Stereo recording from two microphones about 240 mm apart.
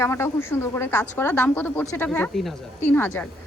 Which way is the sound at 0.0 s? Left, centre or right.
Centre.